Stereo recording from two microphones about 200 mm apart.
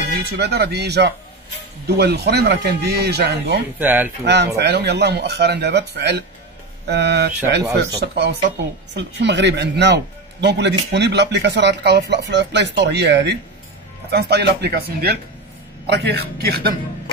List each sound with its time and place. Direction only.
0.2 s speech: 55° right (ahead or behind)
3.8 s speech: 10° right (ahead or behind)
4.2 s speech: 55° right (ahead or behind)